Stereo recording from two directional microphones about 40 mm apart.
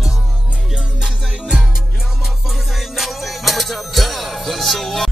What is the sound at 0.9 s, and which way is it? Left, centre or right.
Music, centre.